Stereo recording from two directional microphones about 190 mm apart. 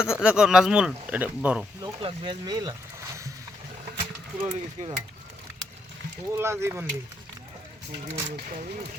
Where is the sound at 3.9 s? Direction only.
25° right (ahead or behind).